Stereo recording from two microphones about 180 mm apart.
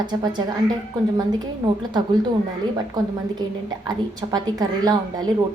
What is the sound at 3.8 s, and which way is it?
A woman's voice, 20° right (ahead or behind).